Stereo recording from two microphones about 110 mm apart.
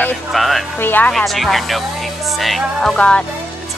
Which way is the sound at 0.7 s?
20° left (ahead or behind).